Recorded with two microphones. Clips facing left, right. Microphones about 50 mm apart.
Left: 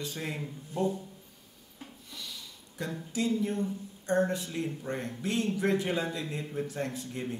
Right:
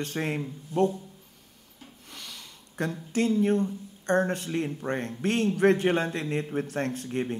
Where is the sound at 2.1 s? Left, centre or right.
Right.